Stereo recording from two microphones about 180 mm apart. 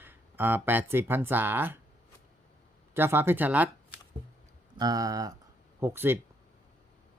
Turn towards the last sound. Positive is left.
turn(degrees=-15)  # may be behind; listen again after turning